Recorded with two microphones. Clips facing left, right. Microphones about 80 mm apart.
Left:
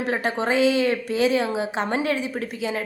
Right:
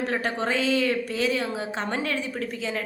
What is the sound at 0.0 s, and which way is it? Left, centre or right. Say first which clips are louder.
A woman's voice: left 3 dB; centre.